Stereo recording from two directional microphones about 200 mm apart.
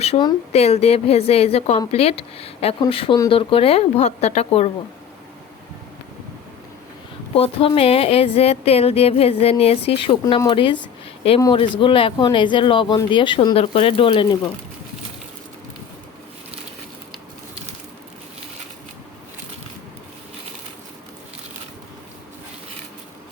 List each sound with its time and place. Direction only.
0.0 s speech: 25° left (ahead or behind)
7.3 s speech: 30° left (ahead or behind)